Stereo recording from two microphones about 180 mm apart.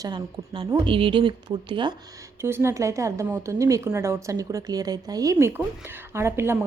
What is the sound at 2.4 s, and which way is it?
A woman's voice, 15° right (ahead or behind).